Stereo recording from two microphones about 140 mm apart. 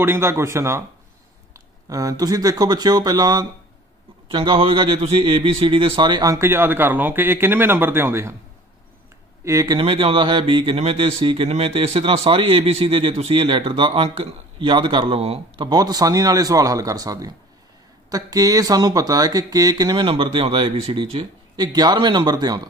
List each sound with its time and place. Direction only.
0.0 s speech: 15° right (ahead or behind)
1.9 s speech: 25° right (ahead or behind)
9.4 s speech: 25° right (ahead or behind)
9.8 s speech: 40° right (ahead or behind)
15.6 s speech: 30° right (ahead or behind)
20.0 s speech: 40° right (ahead or behind)